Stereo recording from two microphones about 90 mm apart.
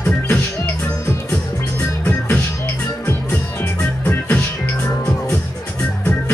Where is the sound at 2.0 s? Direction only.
20° left (ahead or behind).